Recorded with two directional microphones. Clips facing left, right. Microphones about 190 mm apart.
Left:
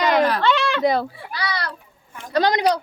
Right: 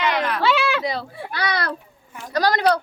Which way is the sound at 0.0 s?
40° left (ahead or behind).